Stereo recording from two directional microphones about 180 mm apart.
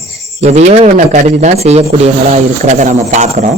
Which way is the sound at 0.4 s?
40° right (ahead or behind).